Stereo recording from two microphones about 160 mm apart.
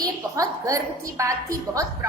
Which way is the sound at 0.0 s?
20° right (ahead or behind).